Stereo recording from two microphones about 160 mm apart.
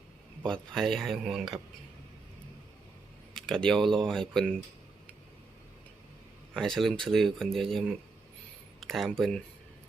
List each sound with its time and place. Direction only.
0.4 s speech: 5° left (ahead or behind)
3.3 s speech: 5° left (ahead or behind)
6.5 s speech: centre (ahead or behind)